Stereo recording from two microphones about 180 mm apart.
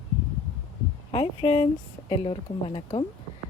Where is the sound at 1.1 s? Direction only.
30° left (ahead or behind).